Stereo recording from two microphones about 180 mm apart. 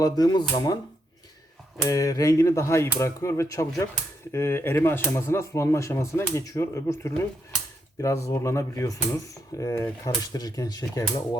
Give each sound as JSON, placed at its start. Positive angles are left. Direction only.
{"t": 0.0, "sound": "speech", "side_deg": 20}
{"t": 1.8, "sound": "speech", "side_deg": 20}